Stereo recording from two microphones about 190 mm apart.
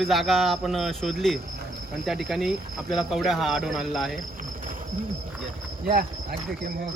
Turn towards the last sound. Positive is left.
turn(degrees=-55)  # may be behind; listen again after turning